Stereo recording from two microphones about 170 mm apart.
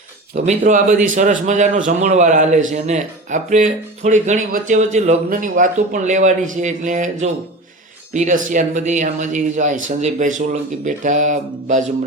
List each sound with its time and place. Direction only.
0.3 s a man's voice: 45° right (ahead or behind)